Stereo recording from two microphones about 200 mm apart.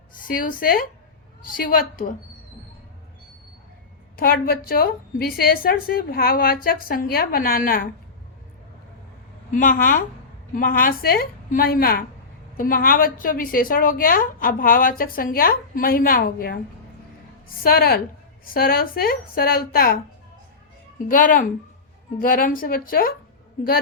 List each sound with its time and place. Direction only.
0.2 s a woman's voice: 45° left (ahead or behind)
4.2 s a woman's voice: 50° left (ahead or behind)
9.5 s a woman's voice: 40° left (ahead or behind)
17.6 s a woman's voice: 50° left (ahead or behind)
21.1 s a woman's voice: 40° left (ahead or behind)